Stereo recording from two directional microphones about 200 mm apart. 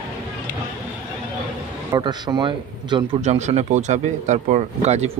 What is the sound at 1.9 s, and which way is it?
A man's voice, 20° right (ahead or behind).